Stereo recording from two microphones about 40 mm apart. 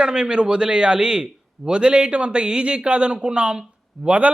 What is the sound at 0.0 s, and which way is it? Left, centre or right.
Speech, right.